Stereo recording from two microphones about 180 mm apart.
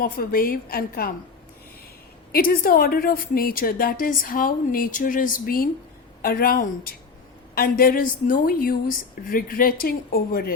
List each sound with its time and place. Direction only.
0.0 s a woman's voice: 55° left (ahead or behind)
2.3 s a woman's voice: 55° left (ahead or behind)